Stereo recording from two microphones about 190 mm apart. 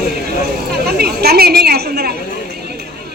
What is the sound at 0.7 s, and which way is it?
A woman's voice, 55° right (ahead or behind).